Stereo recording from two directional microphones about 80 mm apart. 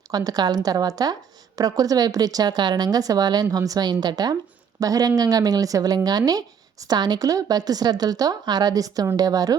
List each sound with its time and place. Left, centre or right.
0.1 s a woman's voice: right